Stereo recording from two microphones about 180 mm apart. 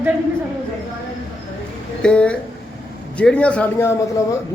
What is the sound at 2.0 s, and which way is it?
A man's voice, 5° left (ahead or behind).